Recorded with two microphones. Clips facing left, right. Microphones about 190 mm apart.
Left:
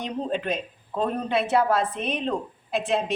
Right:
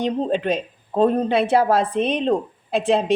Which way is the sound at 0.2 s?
30° right (ahead or behind).